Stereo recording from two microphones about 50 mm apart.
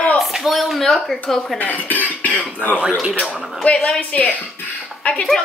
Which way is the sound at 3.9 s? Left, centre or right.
Left.